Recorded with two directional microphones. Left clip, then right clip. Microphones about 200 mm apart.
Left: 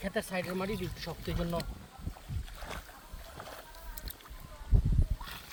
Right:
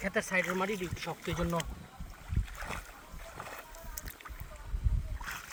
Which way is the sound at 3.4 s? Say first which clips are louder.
Right 2 dB; 25° right (ahead or behind).